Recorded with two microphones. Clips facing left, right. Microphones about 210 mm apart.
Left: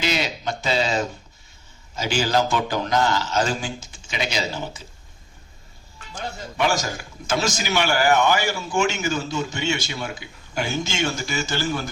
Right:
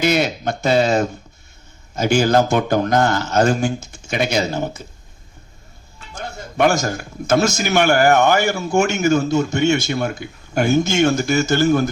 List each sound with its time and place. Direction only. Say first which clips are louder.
0.0 s speech: right 7 dB; 55° right (ahead or behind)
6.8 s speech: right 8 dB; 50° right (ahead or behind)